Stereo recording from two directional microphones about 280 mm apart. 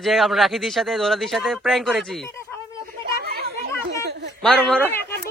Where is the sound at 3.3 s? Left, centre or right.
Right.